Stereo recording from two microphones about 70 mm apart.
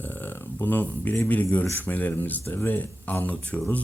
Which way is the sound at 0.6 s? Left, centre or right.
Left.